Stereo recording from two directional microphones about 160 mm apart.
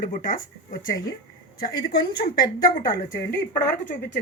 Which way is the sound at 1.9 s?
75° left (ahead or behind).